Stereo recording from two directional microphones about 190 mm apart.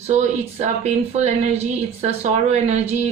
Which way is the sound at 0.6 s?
35° right (ahead or behind).